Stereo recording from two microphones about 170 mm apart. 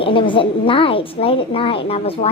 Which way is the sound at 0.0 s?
30° left (ahead or behind).